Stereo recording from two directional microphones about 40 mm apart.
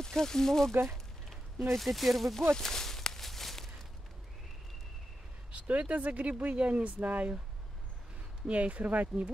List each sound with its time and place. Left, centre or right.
0.0 s speech: centre
2.5 s walk: centre
5.7 s speech: right
8.5 s speech: right